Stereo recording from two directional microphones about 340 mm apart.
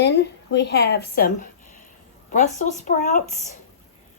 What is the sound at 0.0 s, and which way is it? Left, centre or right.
Speech, left.